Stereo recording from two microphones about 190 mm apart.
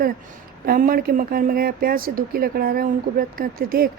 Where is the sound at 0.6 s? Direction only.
50° right (ahead or behind).